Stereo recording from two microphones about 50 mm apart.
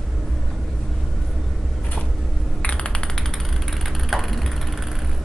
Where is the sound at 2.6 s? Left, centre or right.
Left.